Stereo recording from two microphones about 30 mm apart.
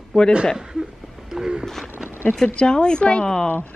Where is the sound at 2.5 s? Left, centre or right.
Left.